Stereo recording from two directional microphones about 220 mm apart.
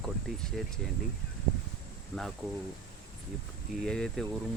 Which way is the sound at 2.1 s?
Centre (ahead or behind).